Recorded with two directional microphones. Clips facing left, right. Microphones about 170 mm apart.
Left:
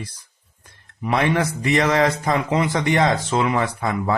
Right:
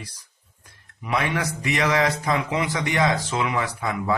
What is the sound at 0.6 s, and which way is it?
Speech, 45° left (ahead or behind).